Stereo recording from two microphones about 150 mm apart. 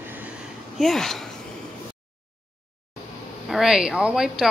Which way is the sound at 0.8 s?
Centre (ahead or behind).